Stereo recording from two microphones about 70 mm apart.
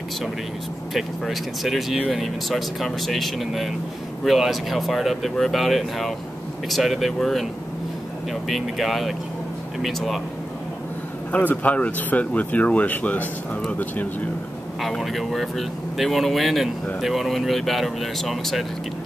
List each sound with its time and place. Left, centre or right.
0.9 s speech: centre
11.3 s speech: left
14.8 s speech: centre